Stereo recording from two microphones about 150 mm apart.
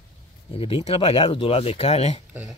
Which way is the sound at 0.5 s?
40° left (ahead or behind).